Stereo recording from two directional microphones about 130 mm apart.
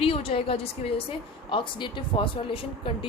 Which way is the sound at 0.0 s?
45° left (ahead or behind).